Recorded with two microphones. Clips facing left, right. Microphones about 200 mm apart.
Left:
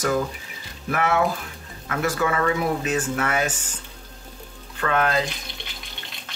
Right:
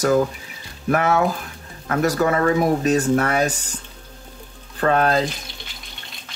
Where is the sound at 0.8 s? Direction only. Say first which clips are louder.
Right 3 dB; 40° right (ahead or behind).